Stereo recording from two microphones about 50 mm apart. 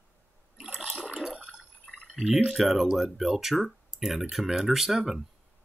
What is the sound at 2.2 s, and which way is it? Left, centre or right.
Speech, centre.